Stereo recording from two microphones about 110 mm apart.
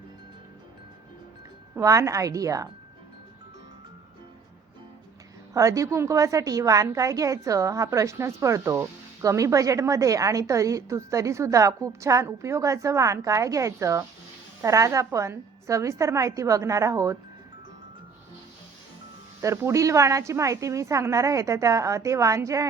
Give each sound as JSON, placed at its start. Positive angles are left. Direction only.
{"t": 1.7, "sound": "a woman's voice", "side_deg": -30}
{"t": 5.5, "sound": "a woman's voice", "side_deg": -30}
{"t": 19.4, "sound": "a woman's voice", "side_deg": -25}